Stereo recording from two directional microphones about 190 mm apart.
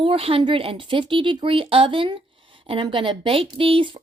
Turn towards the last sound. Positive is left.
turn(degrees=-25)  # may be behind; listen again after turning